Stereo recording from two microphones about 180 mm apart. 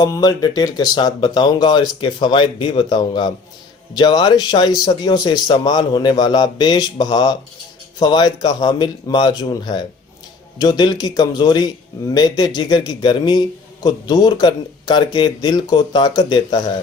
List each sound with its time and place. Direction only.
0.0 s speech: 20° left (ahead or behind)